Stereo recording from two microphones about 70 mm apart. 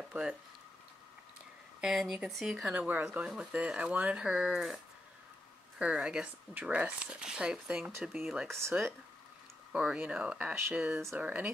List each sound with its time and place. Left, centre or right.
0.1 s speech: centre
1.8 s speech: centre
2.7 s speech: right; by 4.7 s centre
5.8 s speech: centre
8.5 s speech: right
9.7 s speech: centre